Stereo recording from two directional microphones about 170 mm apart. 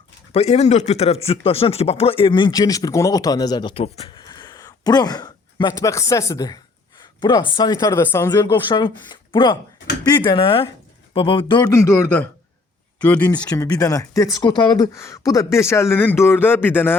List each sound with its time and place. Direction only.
0.3 s speech: 40° left (ahead or behind)
4.2 s speech: 25° left (ahead or behind)
13.4 s speech: 20° left (ahead or behind)